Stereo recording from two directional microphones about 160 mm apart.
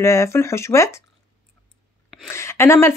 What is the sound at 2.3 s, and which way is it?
Speech, 15° left (ahead or behind).